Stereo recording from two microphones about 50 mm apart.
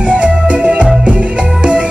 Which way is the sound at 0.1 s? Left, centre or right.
Right.